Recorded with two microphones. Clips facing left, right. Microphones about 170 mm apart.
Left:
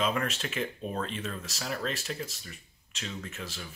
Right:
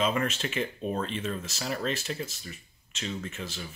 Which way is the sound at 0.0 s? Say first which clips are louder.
Right 2 dB; centre (ahead or behind).